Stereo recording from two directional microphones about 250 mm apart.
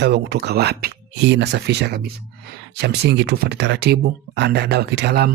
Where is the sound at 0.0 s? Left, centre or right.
Right.